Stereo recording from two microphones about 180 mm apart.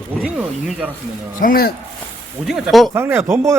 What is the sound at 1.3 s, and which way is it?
Speech, 55° left (ahead or behind).